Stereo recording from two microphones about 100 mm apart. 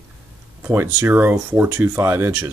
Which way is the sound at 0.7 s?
20° right (ahead or behind).